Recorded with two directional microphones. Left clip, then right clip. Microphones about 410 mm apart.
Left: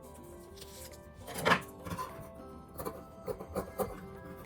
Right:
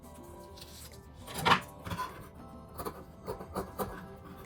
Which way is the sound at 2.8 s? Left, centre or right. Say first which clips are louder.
Even; centre.